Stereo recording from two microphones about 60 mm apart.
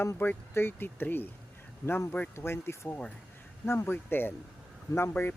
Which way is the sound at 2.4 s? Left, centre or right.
Left.